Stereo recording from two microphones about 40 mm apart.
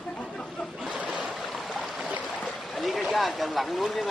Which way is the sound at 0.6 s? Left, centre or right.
Left.